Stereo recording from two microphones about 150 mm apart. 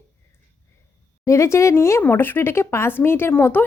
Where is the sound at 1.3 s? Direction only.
20° left (ahead or behind).